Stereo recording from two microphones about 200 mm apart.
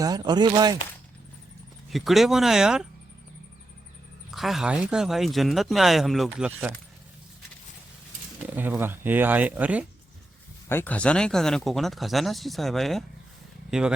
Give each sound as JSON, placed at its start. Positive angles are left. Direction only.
{"t": 0.0, "sound": "speech", "side_deg": -20}
{"t": 1.9, "sound": "speech", "side_deg": 0}
{"t": 4.3, "sound": "speech", "side_deg": 0}
{"t": 8.4, "sound": "speech", "side_deg": -10}
{"t": 10.7, "sound": "speech", "side_deg": 10}